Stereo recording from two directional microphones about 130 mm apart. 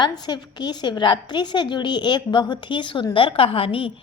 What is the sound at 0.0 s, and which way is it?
A woman's voice, 35° left (ahead or behind).